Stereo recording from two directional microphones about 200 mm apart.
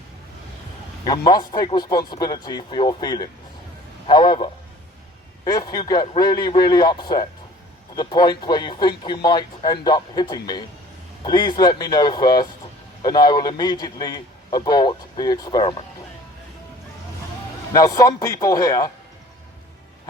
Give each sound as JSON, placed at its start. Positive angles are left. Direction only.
{"t": 1.0, "sound": "a man's voice", "side_deg": 20}
{"t": 5.5, "sound": "a man's voice", "side_deg": 20}
{"t": 17.7, "sound": "speech", "side_deg": 15}